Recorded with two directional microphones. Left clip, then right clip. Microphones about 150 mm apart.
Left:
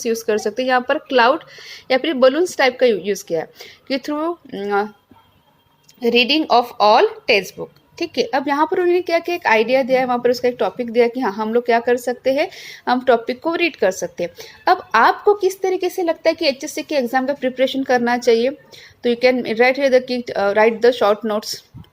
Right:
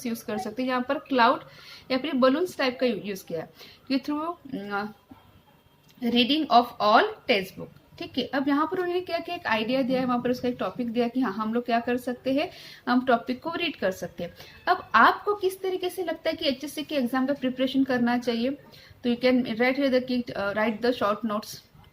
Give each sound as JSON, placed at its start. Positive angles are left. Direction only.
{"t": 0.0, "sound": "a woman's voice", "side_deg": 35}
{"t": 6.0, "sound": "a woman's voice", "side_deg": 35}